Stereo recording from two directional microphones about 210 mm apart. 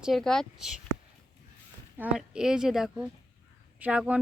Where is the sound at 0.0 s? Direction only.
Centre (ahead or behind).